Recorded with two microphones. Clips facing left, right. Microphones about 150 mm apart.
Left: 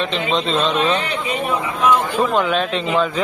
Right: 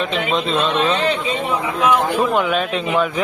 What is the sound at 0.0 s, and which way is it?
Speech, 5° right (ahead or behind).